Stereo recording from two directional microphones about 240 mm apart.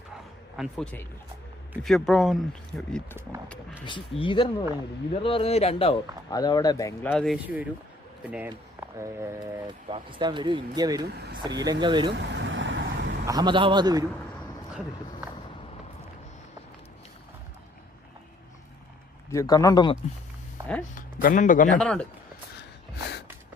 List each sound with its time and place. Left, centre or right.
0.5 s speech: centre
3.8 s a man's voice: centre
7.4 s speech: centre
12.1 s vehicle: right
13.2 s speech: centre
19.3 s speech: centre
20.9 s a man's voice: left
21.8 s speech: centre